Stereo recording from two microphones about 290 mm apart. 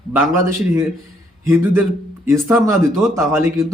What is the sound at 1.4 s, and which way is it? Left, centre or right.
A man's voice, centre.